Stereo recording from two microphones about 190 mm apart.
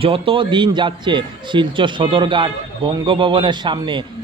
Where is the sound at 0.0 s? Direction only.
30° right (ahead or behind).